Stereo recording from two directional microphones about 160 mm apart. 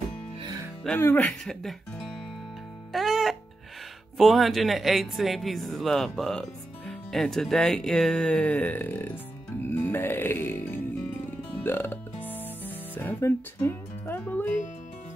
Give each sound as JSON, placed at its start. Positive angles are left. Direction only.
{"t": 0.4, "sound": "music", "side_deg": -20}
{"t": 0.8, "sound": "music", "side_deg": 10}
{"t": 1.4, "sound": "speech", "side_deg": 0}
{"t": 2.9, "sound": "music", "side_deg": 0}
{"t": 4.2, "sound": "speech", "side_deg": 0}
{"t": 9.7, "sound": "music", "side_deg": 15}